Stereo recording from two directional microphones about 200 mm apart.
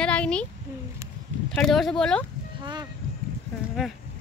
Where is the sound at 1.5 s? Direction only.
Centre (ahead or behind).